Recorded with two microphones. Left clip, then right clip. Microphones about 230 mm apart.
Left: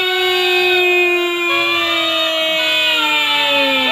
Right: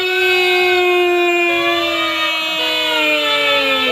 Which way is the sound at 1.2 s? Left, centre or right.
Centre.